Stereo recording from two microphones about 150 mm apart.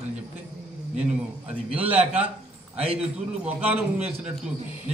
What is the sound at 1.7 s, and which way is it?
A man's voice, 10° right (ahead or behind).